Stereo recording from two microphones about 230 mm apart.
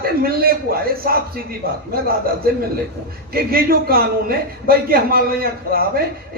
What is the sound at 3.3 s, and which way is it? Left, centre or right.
A man's voice, right.